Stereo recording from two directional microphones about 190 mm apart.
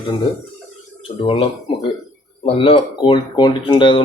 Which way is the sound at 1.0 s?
30° left (ahead or behind).